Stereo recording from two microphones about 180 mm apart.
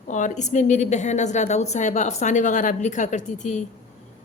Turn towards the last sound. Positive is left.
turn(degrees=40)  # may be behind; listen again after turning